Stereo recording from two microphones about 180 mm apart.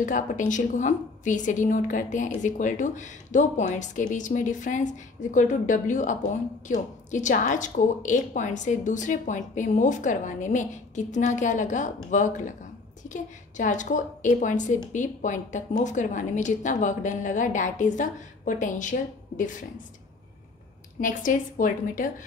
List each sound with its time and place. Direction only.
0.5 s a woman's voice: 45° left (ahead or behind)
21.0 s a woman's voice: 45° left (ahead or behind)